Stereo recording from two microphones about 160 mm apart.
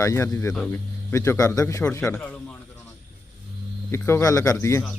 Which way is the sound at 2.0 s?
10° left (ahead or behind).